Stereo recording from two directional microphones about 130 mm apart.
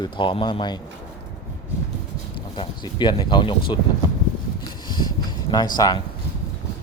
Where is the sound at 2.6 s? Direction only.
35° left (ahead or behind).